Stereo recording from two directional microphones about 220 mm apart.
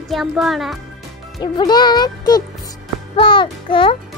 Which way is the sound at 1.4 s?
20° left (ahead or behind).